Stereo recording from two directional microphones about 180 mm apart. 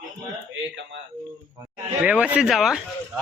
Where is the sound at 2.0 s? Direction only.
10° right (ahead or behind).